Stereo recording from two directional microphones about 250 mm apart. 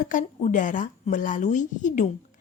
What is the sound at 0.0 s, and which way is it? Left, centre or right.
A woman's voice, left.